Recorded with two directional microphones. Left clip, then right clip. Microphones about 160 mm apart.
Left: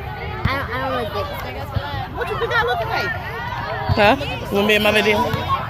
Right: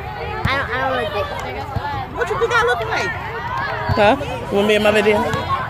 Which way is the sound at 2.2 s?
70° right (ahead or behind).